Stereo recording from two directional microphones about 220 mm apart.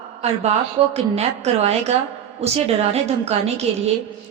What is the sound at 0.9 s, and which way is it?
A woman's voice, 30° right (ahead or behind).